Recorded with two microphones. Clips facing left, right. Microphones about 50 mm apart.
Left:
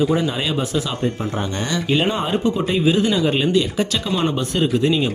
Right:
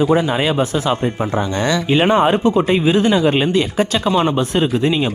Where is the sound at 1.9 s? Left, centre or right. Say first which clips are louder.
Right 6 dB; right.